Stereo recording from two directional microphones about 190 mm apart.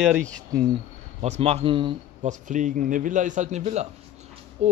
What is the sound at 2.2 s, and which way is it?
A man's voice, 40° right (ahead or behind).